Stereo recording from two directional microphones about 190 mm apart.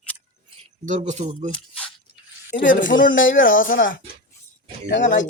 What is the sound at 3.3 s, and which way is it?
Speech, 90° left.